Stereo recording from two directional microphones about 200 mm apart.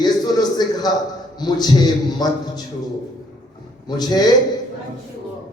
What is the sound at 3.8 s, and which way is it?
Speech, 20° left (ahead or behind).